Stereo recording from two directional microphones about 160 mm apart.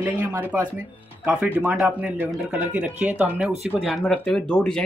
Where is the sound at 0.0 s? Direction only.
10° right (ahead or behind).